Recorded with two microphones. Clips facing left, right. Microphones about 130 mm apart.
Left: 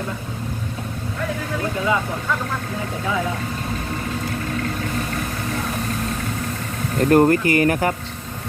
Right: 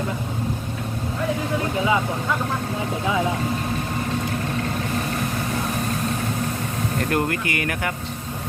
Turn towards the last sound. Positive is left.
turn(degrees=35)  # may be behind; listen again after turning